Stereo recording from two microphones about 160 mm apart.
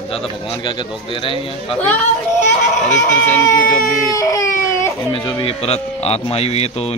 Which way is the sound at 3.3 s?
10° left (ahead or behind).